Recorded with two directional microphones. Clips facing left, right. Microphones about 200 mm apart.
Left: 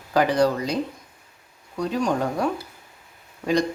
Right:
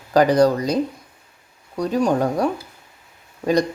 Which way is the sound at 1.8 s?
40° right (ahead or behind).